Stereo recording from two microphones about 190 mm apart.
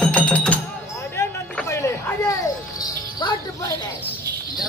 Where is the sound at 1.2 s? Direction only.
15° left (ahead or behind).